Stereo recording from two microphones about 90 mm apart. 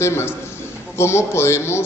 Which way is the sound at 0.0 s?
30° left (ahead or behind).